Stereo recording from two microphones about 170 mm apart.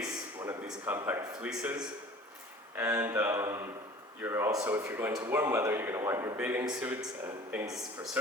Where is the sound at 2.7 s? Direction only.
15° right (ahead or behind).